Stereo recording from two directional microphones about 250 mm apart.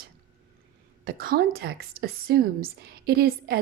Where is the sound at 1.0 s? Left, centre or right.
Right.